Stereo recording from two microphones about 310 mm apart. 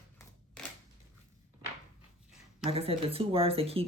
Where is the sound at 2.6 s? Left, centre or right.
Centre.